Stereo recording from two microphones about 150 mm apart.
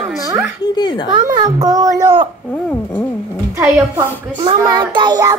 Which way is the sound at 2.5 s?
10° left (ahead or behind).